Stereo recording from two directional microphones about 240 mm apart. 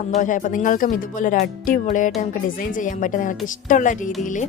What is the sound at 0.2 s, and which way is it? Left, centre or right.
A woman's voice, left.